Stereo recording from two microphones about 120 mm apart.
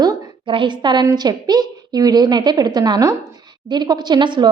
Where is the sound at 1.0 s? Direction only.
35° right (ahead or behind).